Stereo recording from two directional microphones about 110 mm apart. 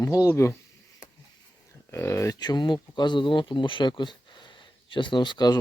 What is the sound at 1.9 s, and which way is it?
Speech, 25° left (ahead or behind).